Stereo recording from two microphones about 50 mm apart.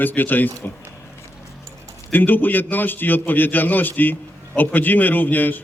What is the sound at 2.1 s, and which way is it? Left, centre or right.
A man's voice, left.